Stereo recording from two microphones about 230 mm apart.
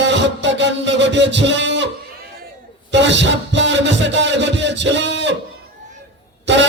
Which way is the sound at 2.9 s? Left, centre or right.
Right.